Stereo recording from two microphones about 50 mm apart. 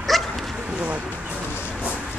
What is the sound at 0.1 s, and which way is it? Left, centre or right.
Dog, centre.